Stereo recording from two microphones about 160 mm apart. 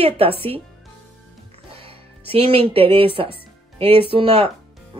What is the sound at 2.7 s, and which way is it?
Speech, 35° right (ahead or behind).